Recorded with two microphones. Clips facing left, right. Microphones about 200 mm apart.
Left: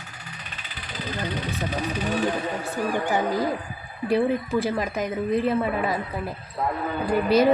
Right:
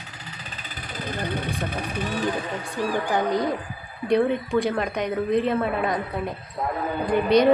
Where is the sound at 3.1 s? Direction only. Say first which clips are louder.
Right 2 dB; 5° left (ahead or behind).